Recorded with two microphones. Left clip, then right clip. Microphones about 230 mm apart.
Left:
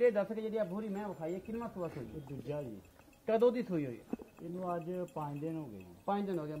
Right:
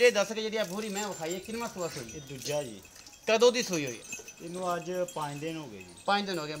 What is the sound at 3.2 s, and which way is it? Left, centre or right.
Speech, centre.